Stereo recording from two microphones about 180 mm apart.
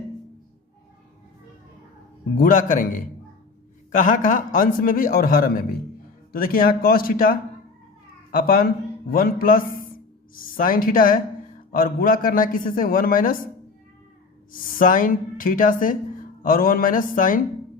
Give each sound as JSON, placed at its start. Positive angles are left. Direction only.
{"t": 2.4, "sound": "a man's voice", "side_deg": 45}
{"t": 8.4, "sound": "a man's voice", "side_deg": 55}
{"t": 14.5, "sound": "a man's voice", "side_deg": 50}